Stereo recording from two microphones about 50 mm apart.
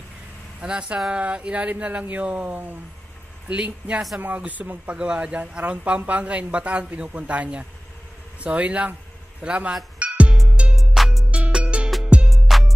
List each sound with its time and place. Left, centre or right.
0.6 s speech: centre; by 2.8 s right
3.4 s speech: right
4.9 s speech: right
9.9 s music: right
12.3 s music: centre